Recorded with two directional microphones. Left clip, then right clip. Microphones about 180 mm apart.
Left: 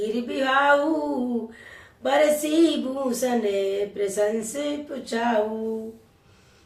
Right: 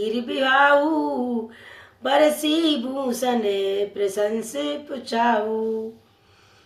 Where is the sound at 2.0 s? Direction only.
30° right (ahead or behind).